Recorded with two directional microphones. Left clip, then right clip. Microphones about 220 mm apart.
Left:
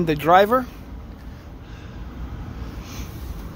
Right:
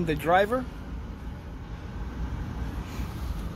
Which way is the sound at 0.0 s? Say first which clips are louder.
Left 8 dB; 30° left (ahead or behind).